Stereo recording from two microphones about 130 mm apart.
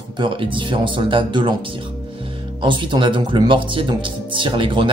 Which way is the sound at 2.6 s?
40° right (ahead or behind).